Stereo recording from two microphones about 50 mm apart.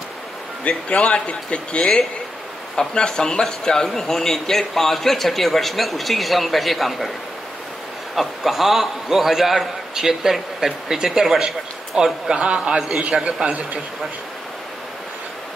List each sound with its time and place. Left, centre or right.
0.7 s a man's voice: left; by 7.1 s centre
8.2 s a man's voice: centre; by 13.7 s right